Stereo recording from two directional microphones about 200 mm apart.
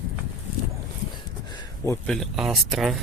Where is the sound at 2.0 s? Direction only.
Centre (ahead or behind).